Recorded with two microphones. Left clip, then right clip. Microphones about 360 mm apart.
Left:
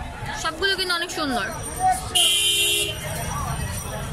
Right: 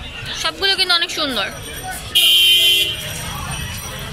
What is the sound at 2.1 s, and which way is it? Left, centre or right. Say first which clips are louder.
Fire alarm: right 8 dB; left.